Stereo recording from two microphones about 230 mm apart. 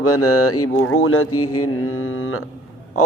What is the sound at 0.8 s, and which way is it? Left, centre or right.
Mantra, left.